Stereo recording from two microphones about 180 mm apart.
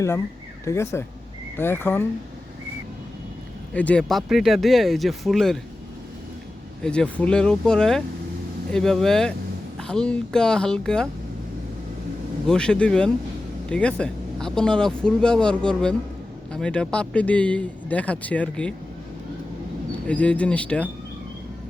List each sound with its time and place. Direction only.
0.6 s speech: 15° left (ahead or behind)
3.8 s speech: 5° left (ahead or behind)
6.8 s speech: 5° left (ahead or behind)
12.5 s speech: 5° left (ahead or behind)
20.1 s speech: 5° left (ahead or behind)